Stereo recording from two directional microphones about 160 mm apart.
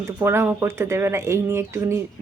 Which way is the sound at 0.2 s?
15° right (ahead or behind).